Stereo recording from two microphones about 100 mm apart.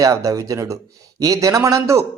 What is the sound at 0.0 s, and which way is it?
A man's voice, 35° right (ahead or behind).